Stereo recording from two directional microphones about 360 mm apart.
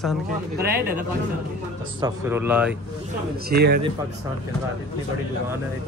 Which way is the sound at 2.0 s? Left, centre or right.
Centre.